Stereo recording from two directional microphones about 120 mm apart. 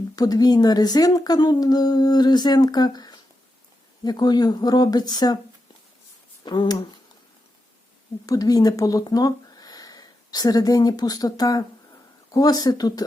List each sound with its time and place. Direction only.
0.2 s speech: 30° left (ahead or behind)
6.4 s speech: 40° left (ahead or behind)
8.3 s speech: 30° left (ahead or behind)